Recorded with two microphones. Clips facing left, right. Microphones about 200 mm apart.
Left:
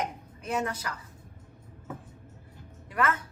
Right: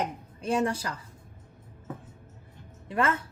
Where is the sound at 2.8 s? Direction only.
25° right (ahead or behind).